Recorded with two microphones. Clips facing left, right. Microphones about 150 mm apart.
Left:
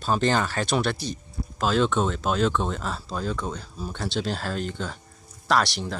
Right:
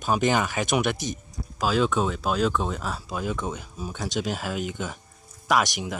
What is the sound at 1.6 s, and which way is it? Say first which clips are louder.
Speech: left 1 dB; 5° right (ahead or behind).